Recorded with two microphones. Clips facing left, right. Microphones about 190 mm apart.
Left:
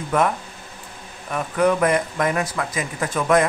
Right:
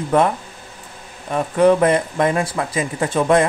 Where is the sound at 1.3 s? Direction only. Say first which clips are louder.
Right 5 dB; 30° right (ahead or behind).